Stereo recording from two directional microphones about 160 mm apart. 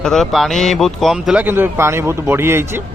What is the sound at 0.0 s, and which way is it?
Speech, 5° left (ahead or behind).